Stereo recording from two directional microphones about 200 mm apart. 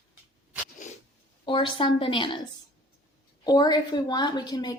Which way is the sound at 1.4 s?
25° left (ahead or behind).